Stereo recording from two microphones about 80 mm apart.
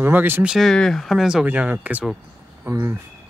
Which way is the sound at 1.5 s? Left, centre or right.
Centre.